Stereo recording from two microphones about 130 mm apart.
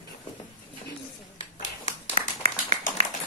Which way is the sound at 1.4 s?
50° left (ahead or behind).